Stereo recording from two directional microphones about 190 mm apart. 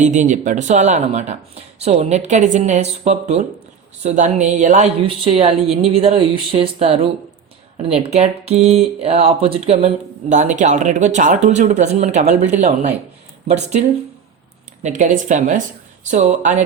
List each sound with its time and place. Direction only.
0.0 s speech: 40° right (ahead or behind)
5.0 s speech: 30° right (ahead or behind)
14.8 s speech: 40° right (ahead or behind)